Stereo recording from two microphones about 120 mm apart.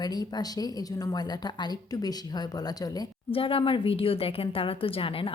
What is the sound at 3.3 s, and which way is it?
A woman's voice, 50° left (ahead or behind).